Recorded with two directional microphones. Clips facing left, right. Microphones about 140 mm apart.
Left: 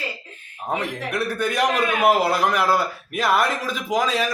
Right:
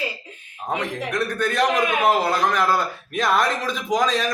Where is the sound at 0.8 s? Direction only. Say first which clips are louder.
Right 2 dB; 10° left (ahead or behind).